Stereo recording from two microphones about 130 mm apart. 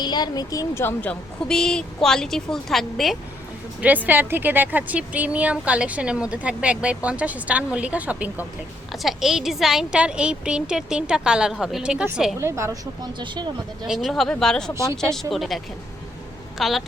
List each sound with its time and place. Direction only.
0.0 s a woman's voice: 35° left (ahead or behind)
1.5 s a woman's voice: 5° left (ahead or behind)
3.8 s a woman's voice: 10° right (ahead or behind)
12.4 s speech: 20° right (ahead or behind); by 13.5 s 35° right (ahead or behind)
13.8 s a woman's voice: centre (ahead or behind)